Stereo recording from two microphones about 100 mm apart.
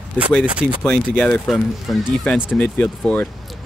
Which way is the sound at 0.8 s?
10° left (ahead or behind).